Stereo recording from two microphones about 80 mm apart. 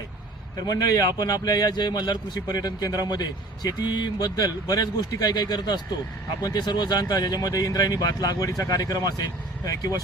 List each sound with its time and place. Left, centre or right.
0.5 s a man's voice: left